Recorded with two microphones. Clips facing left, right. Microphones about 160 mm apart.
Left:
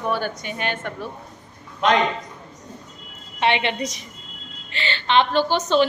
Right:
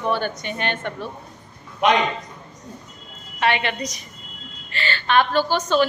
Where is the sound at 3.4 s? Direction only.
25° left (ahead or behind).